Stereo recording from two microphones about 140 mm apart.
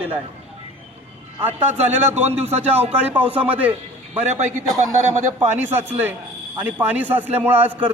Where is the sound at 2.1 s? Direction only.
15° right (ahead or behind).